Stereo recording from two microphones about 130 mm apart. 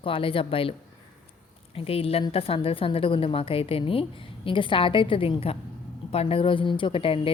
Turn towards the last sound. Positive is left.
turn(degrees=45)  # may be behind; listen again after turning